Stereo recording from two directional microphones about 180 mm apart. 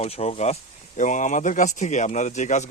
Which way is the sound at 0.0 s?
35° left (ahead or behind).